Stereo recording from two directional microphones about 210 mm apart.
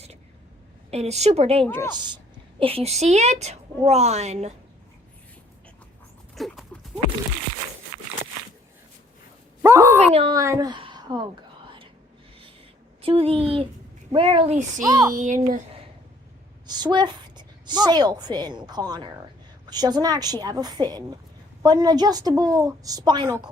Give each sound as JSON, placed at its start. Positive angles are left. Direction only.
{"t": 0.9, "sound": "a woman's voice", "side_deg": -30}
{"t": 1.6, "sound": "a woman's voice", "side_deg": 10}
{"t": 2.6, "sound": "a woman's voice", "side_deg": -25}
{"t": 6.3, "sound": "dog", "side_deg": 0}
{"t": 9.6, "sound": "a sound", "side_deg": -10}
{"t": 10.2, "sound": "a woman's voice", "side_deg": -20}
{"t": 13.0, "sound": "a woman's voice", "side_deg": -25}
{"t": 15.1, "sound": "a woman's voice", "side_deg": -35}
{"t": 16.6, "sound": "a woman's voice", "side_deg": -20}